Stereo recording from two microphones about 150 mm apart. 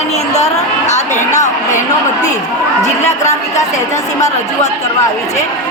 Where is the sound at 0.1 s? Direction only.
45° left (ahead or behind).